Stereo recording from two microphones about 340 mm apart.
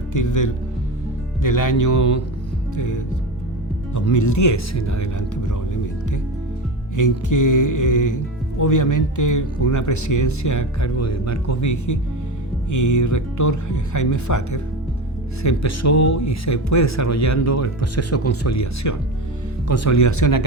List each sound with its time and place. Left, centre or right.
0.1 s speech: left